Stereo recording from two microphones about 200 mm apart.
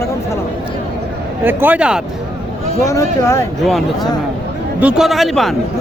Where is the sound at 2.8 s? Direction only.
15° left (ahead or behind).